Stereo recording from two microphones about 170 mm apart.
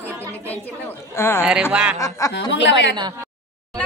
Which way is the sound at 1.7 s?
5° right (ahead or behind).